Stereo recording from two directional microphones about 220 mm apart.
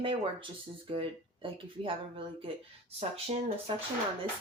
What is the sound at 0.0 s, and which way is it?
Speech, 25° right (ahead or behind).